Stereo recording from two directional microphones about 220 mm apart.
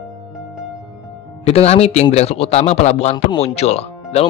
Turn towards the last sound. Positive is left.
turn(degrees=30)  # may be behind; listen again after turning